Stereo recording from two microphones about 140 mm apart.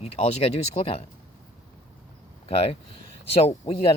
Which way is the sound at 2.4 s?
45° left (ahead or behind).